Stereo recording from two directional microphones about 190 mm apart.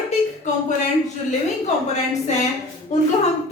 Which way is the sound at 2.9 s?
40° left (ahead or behind).